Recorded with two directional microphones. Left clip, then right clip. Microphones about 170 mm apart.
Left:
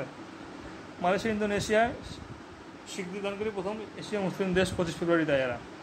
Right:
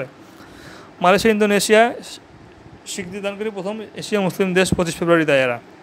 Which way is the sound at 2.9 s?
60° right (ahead or behind).